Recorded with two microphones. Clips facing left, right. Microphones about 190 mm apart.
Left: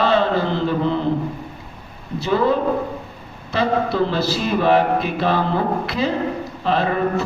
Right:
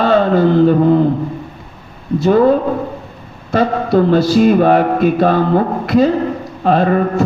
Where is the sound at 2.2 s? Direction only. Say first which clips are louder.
Right 7 dB; 50° right (ahead or behind).